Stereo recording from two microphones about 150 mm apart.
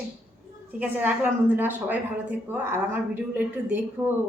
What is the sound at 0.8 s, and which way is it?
A woman's voice, 10° right (ahead or behind).